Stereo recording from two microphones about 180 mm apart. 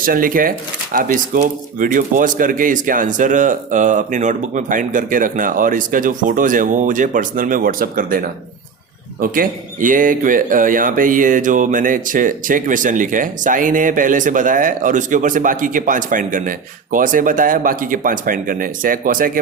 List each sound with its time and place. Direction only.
0.0 s speech: 50° right (ahead or behind)
9.2 s speech: 50° right (ahead or behind)